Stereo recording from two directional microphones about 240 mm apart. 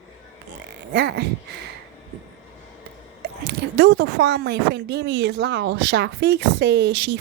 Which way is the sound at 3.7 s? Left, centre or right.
Right.